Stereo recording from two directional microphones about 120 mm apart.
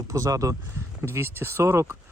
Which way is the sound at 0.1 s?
30° right (ahead or behind).